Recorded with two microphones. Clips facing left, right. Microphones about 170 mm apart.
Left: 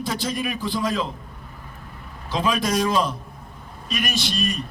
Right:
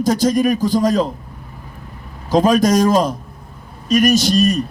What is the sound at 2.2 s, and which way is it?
A man's voice, 40° right (ahead or behind).